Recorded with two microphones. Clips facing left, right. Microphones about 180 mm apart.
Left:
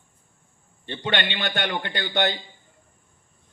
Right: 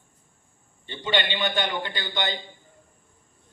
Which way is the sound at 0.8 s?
65° left (ahead or behind).